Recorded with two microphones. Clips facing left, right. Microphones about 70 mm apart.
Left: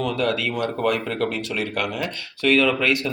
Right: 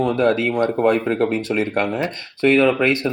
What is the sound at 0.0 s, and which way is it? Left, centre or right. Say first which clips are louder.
Speech: right 6 dB; right.